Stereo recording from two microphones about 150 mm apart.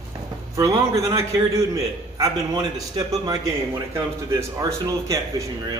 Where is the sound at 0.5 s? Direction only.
20° right (ahead or behind).